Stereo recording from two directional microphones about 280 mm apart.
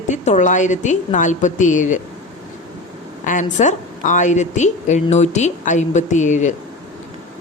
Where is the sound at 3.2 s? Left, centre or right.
Left.